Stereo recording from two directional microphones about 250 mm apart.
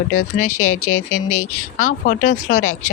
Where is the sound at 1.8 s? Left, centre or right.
Left.